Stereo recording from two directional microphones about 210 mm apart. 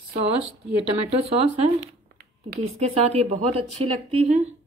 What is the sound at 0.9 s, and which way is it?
Speech, 30° right (ahead or behind).